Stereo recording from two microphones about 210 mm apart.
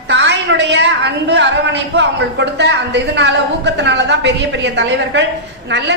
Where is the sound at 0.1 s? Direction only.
55° right (ahead or behind).